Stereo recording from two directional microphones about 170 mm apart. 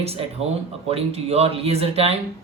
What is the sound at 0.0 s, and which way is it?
Speech, 35° right (ahead or behind).